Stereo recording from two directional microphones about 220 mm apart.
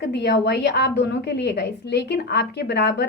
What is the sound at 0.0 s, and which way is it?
A woman's voice, 50° left (ahead or behind).